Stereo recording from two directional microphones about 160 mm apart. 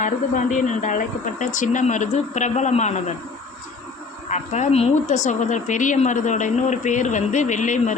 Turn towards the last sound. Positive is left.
turn(degrees=50)  # may be behind; listen again after turning